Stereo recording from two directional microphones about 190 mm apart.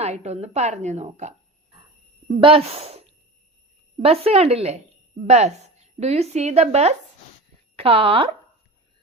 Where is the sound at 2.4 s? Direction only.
30° right (ahead or behind).